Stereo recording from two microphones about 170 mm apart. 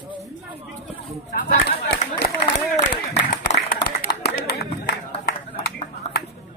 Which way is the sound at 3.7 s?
65° left (ahead or behind).